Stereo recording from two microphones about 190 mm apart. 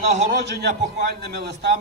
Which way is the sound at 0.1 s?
35° right (ahead or behind).